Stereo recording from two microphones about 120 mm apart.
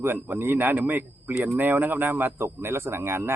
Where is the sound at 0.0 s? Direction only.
15° right (ahead or behind).